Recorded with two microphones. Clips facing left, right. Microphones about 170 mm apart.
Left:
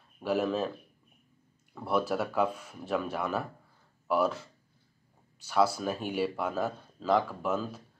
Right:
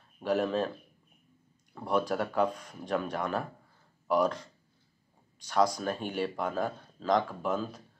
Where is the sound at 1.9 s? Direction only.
5° left (ahead or behind).